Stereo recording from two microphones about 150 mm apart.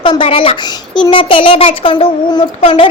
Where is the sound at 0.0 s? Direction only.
35° left (ahead or behind).